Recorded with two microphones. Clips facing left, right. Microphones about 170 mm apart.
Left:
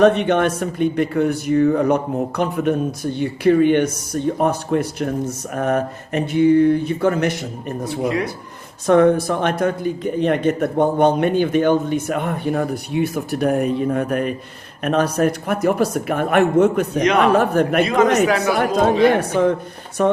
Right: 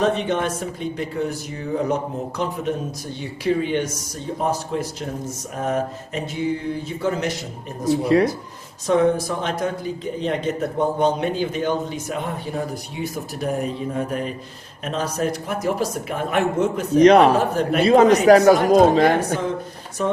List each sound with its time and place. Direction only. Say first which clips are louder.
0.0 s a man's voice: left 6 dB; 65° left (ahead or behind)
8.0 s speech: right 4 dB; 35° right (ahead or behind)
8.9 s a man's voice: left 4 dB; 60° left (ahead or behind)
17.0 s speech: right 5 dB; 35° right (ahead or behind)
17.3 s a man's voice: left 4 dB; 60° left (ahead or behind)
17.8 s speech: right 3 dB; 30° right (ahead or behind)
20.0 s a man's voice: left 5 dB; 60° left (ahead or behind)